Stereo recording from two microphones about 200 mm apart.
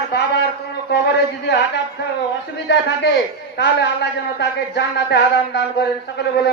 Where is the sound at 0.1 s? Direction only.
55° left (ahead or behind).